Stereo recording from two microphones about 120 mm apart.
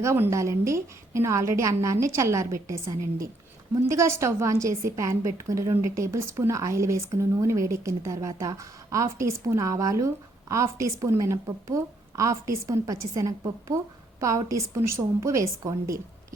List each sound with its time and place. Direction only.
0.0 s a woman's voice: 25° right (ahead or behind)